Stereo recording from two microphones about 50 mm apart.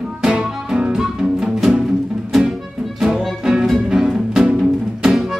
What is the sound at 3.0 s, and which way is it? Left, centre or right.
Music, centre.